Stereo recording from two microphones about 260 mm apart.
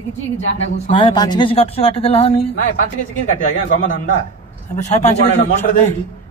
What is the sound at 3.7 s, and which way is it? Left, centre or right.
A man's voice, left.